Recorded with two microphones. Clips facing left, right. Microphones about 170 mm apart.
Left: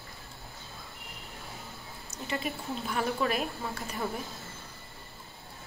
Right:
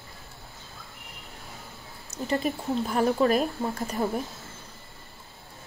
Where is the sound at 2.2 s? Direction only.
40° right (ahead or behind).